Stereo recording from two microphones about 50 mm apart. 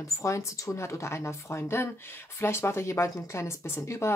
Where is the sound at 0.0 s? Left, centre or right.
Left.